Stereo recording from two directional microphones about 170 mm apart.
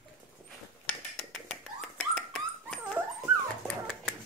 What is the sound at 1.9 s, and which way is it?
Dog, 5° left (ahead or behind).